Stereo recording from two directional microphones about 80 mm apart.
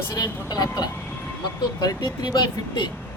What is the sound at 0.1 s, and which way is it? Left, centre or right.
Speech, left.